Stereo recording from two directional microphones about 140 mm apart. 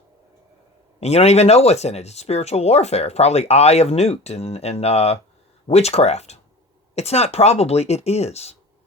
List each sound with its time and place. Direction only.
0.9 s speech: 50° left (ahead or behind)